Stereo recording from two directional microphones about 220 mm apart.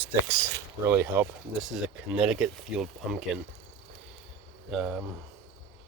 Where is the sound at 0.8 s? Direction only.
10° right (ahead or behind).